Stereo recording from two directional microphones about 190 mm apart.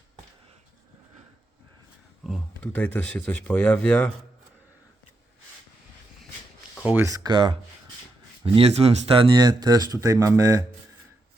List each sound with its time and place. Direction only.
2.2 s speech: 5° left (ahead or behind)
6.8 s speech: 15° right (ahead or behind)